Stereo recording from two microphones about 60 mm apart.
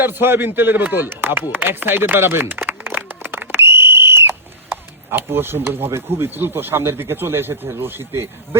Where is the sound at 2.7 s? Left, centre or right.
Right.